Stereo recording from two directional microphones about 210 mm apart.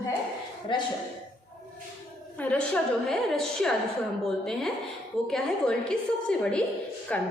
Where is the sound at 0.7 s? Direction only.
20° left (ahead or behind).